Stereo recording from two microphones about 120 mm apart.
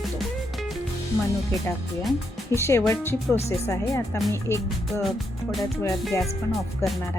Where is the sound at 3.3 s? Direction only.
60° left (ahead or behind).